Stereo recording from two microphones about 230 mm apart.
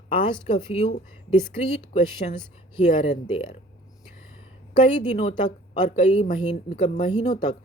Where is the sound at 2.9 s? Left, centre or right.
Left.